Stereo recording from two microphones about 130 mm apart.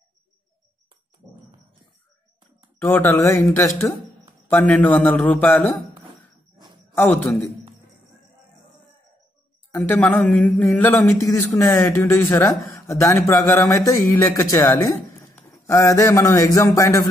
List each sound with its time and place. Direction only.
2.8 s speech: 15° left (ahead or behind)
4.5 s speech: 10° left (ahead or behind)
9.7 s speech: 10° left (ahead or behind)
11.1 s speech: 25° left (ahead or behind)
15.3 s a sound: 20° left (ahead or behind)